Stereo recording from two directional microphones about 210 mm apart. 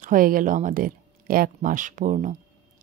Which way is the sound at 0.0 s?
40° right (ahead or behind).